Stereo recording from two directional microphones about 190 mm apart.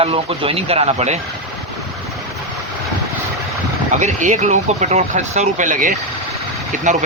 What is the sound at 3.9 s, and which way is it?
A man's voice, 40° right (ahead or behind).